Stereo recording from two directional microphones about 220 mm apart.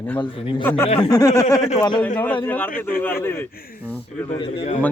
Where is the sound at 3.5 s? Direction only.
40° left (ahead or behind).